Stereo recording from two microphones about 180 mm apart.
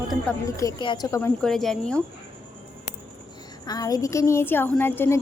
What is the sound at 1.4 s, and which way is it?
Speech, centre (ahead or behind).